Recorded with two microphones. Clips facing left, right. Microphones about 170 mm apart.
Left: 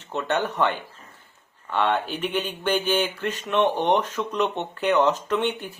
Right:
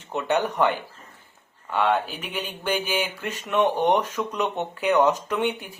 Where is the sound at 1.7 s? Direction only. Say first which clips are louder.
Right 1 dB; 10° right (ahead or behind).